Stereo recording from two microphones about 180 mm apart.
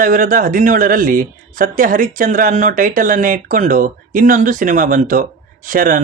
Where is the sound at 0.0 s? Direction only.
50° right (ahead or behind).